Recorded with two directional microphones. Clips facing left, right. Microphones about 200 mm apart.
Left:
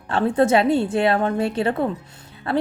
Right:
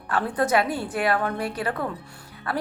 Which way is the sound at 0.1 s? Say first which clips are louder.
Left 5 dB; 25° left (ahead or behind).